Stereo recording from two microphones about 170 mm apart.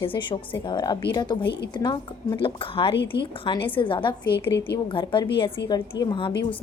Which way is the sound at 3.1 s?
80° left.